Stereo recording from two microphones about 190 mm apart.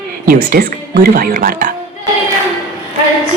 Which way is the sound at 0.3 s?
50° right (ahead or behind).